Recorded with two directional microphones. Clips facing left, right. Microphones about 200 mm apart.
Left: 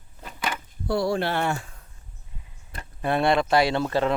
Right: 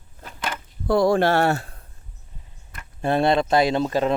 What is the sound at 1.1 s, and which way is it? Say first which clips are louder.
Speech: right 7 dB; 45° right (ahead or behind).